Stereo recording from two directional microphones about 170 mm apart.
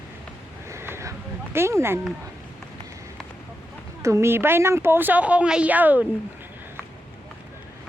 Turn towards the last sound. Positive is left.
turn(degrees=-10)  # may be behind; listen again after turning